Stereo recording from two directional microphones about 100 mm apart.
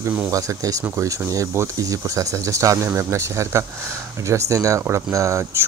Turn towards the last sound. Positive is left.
turn(degrees=-30)  # may be behind; listen again after turning